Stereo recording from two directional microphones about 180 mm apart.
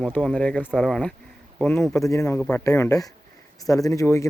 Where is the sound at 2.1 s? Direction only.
15° left (ahead or behind).